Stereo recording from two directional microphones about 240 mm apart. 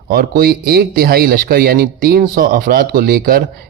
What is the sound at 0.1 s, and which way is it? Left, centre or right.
A man's voice, right.